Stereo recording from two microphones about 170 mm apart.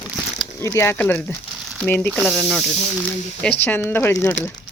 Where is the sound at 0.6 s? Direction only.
15° left (ahead or behind).